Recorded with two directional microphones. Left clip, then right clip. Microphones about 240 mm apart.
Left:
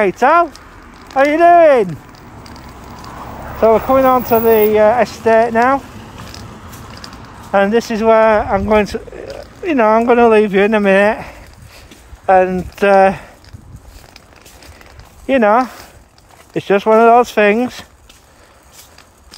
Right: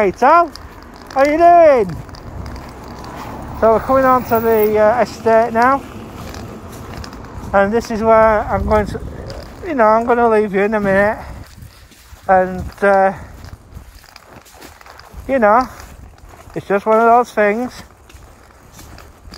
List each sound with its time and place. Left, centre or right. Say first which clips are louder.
0.0 s speech: even; left
3.8 s speech: left 1 dB; left
4.8 s speech: left 2 dB; left
5.2 s speech: even; left
7.5 s speech: left 1 dB; left
15.2 s speech: left 1 dB; left